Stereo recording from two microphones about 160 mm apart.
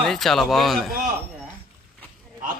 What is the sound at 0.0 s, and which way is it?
Speech, centre (ahead or behind).